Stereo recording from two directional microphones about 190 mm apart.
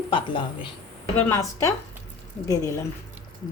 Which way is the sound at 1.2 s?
15° left (ahead or behind).